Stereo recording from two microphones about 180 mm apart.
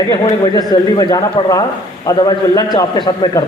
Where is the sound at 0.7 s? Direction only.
20° left (ahead or behind).